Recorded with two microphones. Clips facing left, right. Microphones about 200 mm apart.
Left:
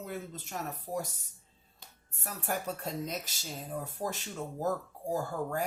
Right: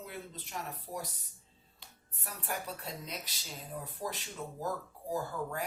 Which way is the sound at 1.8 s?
45° left (ahead or behind).